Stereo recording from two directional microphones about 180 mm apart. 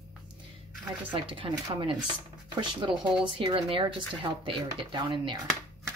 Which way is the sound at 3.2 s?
25° right (ahead or behind).